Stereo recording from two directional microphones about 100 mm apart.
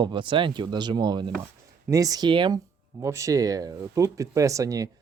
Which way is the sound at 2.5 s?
30° right (ahead or behind).